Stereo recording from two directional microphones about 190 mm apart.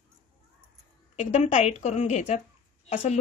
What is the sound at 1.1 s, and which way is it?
A woman's voice, 35° left (ahead or behind).